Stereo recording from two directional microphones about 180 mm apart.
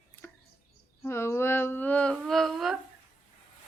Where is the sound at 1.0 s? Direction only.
15° left (ahead or behind).